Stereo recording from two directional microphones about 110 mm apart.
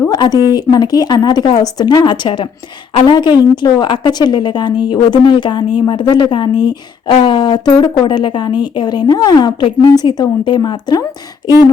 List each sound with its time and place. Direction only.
0.1 s a woman's voice: 35° left (ahead or behind)